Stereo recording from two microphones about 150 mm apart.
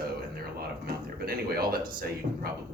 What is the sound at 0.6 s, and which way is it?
Speech, 90° right.